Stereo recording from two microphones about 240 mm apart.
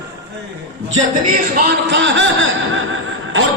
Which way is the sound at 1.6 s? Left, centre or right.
Right.